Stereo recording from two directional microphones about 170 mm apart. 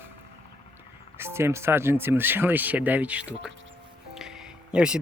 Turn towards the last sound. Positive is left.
turn(degrees=-5)  # may be behind; listen again after turning